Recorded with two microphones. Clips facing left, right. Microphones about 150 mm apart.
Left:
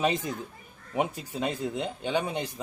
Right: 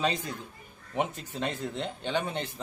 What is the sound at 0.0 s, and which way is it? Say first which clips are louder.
A man's voice: left 3 dB; 20° left (ahead or behind).